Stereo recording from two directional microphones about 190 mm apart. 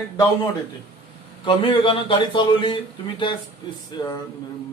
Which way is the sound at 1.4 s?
25° left (ahead or behind).